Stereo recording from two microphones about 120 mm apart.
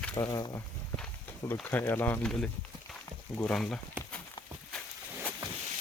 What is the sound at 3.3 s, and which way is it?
Speech, 15° left (ahead or behind).